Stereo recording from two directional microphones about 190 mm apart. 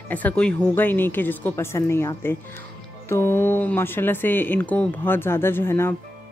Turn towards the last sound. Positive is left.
turn(degrees=10)  # may be behind; listen again after turning